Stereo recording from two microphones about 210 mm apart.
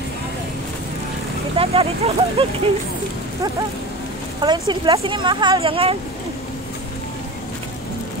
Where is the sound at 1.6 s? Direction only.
25° right (ahead or behind).